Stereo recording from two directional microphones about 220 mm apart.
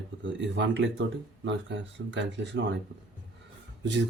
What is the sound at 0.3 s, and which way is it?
Speech, 55° right (ahead or behind).